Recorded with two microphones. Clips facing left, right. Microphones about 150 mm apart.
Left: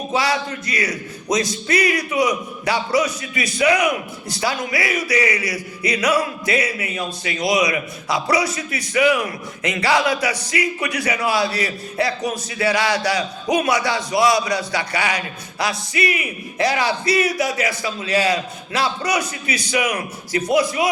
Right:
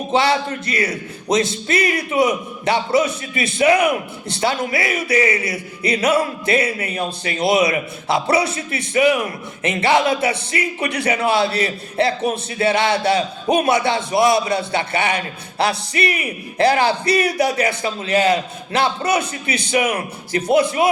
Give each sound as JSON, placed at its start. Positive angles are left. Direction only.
{"t": 0.1, "sound": "a man's voice", "side_deg": -25}